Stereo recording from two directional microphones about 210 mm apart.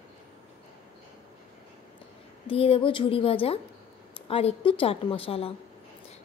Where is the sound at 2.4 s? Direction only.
25° left (ahead or behind).